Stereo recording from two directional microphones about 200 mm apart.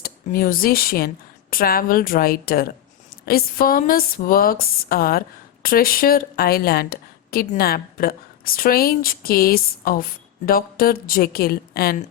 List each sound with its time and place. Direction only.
0.0 s a woman's voice: 45° left (ahead or behind)